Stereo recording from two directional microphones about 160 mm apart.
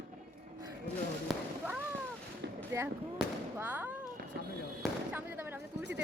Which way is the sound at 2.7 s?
20° right (ahead or behind).